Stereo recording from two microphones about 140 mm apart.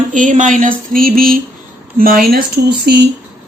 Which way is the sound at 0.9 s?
90° right.